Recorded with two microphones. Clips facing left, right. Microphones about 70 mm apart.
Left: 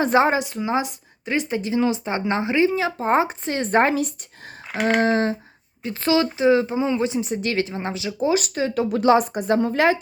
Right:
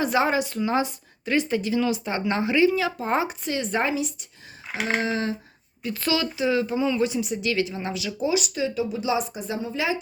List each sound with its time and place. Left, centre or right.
0.0 s speech: left
5.8 s speech: left